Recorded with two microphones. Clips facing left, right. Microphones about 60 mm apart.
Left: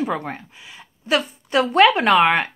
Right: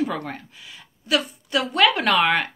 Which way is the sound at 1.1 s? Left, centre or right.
Left.